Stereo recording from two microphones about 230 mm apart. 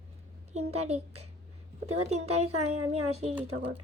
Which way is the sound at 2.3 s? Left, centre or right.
Right.